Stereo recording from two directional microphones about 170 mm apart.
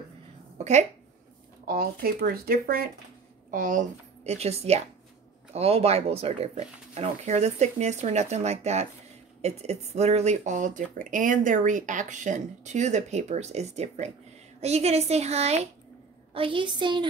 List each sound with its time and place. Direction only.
0.6 s speech: 40° right (ahead or behind)
1.7 s speech: 60° right (ahead or behind)
3.4 s a woman's voice: 50° right (ahead or behind); by 17.0 s 25° right (ahead or behind)